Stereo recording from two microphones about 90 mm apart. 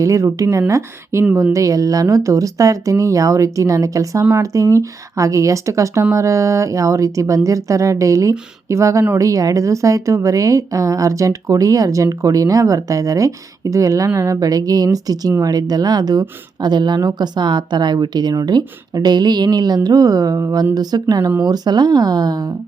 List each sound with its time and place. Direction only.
0.0 s speech: 35° right (ahead or behind)